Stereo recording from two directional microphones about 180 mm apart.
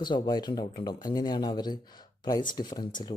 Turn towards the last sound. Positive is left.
turn(degrees=25)  # may be behind; listen again after turning